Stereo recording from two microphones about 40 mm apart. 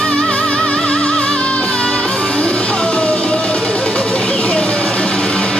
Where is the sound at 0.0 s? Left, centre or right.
Left.